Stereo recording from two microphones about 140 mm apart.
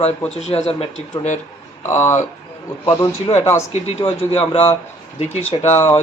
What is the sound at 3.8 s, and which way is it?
Speech, 50° left (ahead or behind).